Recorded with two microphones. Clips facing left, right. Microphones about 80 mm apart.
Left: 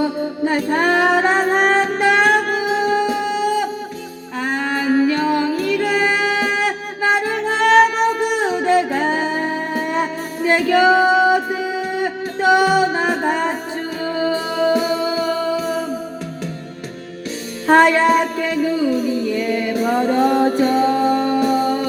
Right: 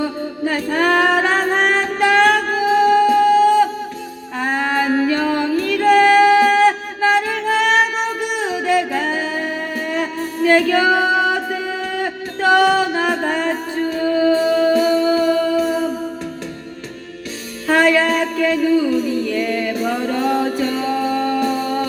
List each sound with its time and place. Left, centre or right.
0.0 s music: left
4.4 s music: centre
17.7 s music: left
18.0 s a sound: left
19.0 s a capella: centre
19.9 s music: left